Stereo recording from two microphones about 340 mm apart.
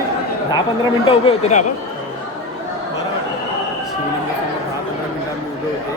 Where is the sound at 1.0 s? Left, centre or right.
Centre.